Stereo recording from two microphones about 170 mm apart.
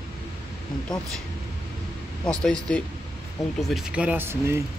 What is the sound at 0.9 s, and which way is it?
Speech, 25° left (ahead or behind).